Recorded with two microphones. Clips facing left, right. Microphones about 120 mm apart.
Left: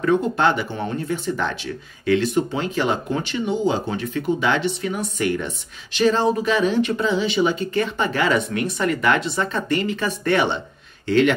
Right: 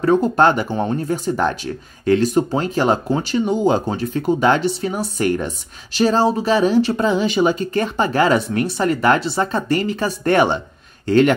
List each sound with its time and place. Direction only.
0.0 s speech: 40° right (ahead or behind)